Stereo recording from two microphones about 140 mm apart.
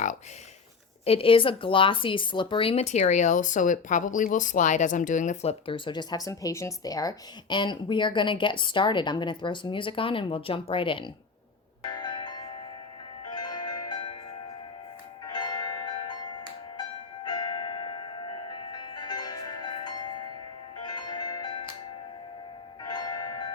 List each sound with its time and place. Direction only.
1.0 s speech: 40° left (ahead or behind)
11.9 s bell: 30° left (ahead or behind)
13.2 s music: 30° left (ahead or behind)
15.3 s change ringing: 30° left (ahead or behind)
17.2 s music: 30° left (ahead or behind)
22.8 s bell: 30° left (ahead or behind)